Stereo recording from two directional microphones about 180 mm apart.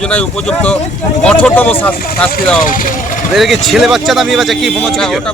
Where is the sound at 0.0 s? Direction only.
5° left (ahead or behind).